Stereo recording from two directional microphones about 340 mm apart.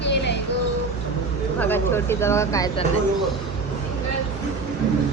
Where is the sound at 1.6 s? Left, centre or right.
Centre.